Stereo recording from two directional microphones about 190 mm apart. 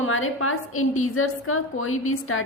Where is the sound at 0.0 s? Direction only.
90° left.